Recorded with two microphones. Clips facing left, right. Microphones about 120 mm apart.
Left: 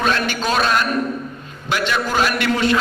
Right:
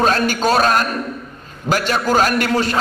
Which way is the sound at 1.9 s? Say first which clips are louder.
Right 3 dB; 40° right (ahead or behind).